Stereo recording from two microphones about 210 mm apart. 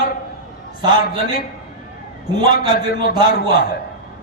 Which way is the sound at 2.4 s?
45° left (ahead or behind).